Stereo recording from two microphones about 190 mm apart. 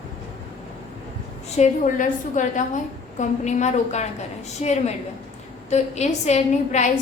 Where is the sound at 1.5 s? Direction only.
35° left (ahead or behind).